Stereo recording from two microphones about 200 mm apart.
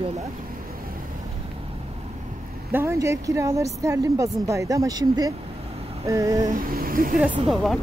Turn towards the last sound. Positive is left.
turn(degrees=0)  # may be behind; listen again after turning